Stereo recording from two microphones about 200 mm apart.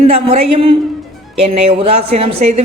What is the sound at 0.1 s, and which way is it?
Speech, 30° right (ahead or behind).